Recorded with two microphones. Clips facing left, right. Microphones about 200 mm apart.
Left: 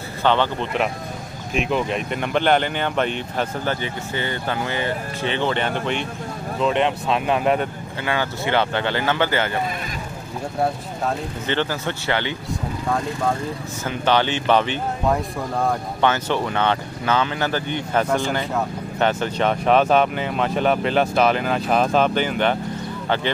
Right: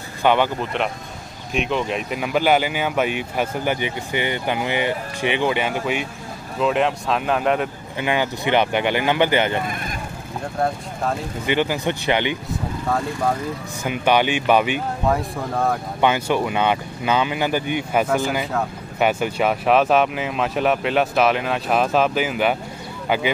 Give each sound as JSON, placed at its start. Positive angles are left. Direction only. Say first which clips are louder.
{"t": 0.2, "sound": "speech", "louder": "right 2 dB", "side_deg": -10}
{"t": 1.5, "sound": "speech", "louder": "even", "side_deg": 0}
{"t": 8.0, "sound": "speech", "louder": "right 2 dB", "side_deg": -15}
{"t": 11.4, "sound": "speech", "louder": "right 4 dB", "side_deg": -15}
{"t": 13.8, "sound": "speech", "louder": "right 1 dB", "side_deg": -15}
{"t": 15.0, "sound": "speech", "louder": "even", "side_deg": 0}
{"t": 16.0, "sound": "speech", "louder": "right 2 dB", "side_deg": -10}